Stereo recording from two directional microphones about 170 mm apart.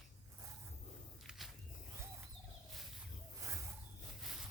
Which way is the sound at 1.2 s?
Centre (ahead or behind).